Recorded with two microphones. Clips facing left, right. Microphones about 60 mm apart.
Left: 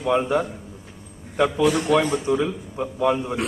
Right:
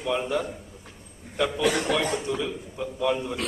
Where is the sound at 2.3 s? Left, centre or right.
Left.